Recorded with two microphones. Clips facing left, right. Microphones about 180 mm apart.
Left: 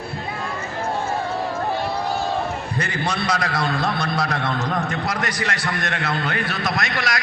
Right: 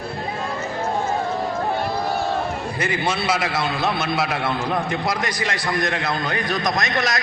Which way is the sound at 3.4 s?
25° right (ahead or behind).